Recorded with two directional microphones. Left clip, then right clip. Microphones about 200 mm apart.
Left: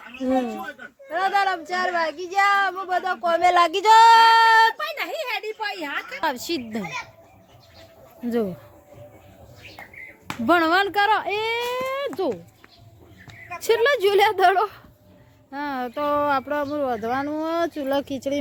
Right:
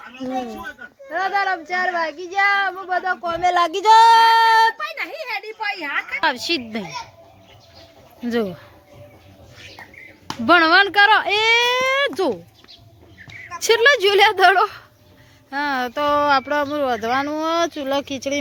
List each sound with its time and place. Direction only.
1.1 s speech: 5° right (ahead or behind)
3.2 s speech: 25° left (ahead or behind)
3.5 s speech: 5° left (ahead or behind)
4.8 s a sound: 45° left (ahead or behind)
6.1 s speech: 10° left (ahead or behind)
10.4 s speech: 5° left (ahead or behind); by 12.4 s 15° right (ahead or behind)
13.6 s speech: 5° left (ahead or behind)